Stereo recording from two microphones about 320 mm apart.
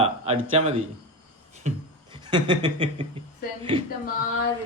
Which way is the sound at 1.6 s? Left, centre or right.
Centre.